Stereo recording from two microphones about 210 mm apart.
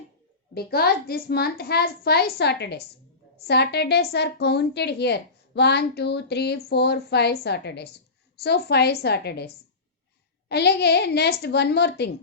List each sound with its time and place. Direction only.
0.5 s a woman's voice: 50° left (ahead or behind)
10.5 s a woman's voice: 50° left (ahead or behind)